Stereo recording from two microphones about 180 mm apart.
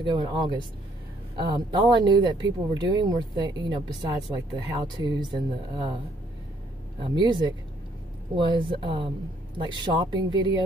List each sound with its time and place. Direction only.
0.0 s speech: 25° right (ahead or behind)
7.0 s speech: 25° right (ahead or behind)